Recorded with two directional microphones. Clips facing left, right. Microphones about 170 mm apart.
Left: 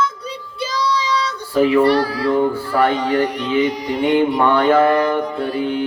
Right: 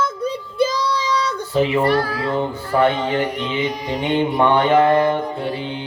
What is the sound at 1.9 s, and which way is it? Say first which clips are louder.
Speech: left 3 dB; 50° right (ahead or behind).